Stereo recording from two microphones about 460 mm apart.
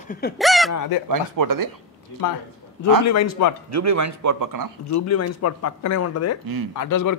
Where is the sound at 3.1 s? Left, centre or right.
Left.